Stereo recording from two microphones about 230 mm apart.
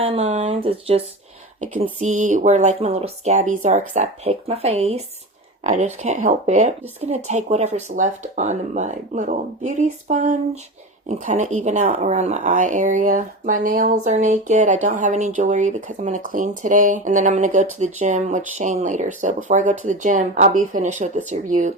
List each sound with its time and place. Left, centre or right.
0.0 s speech: right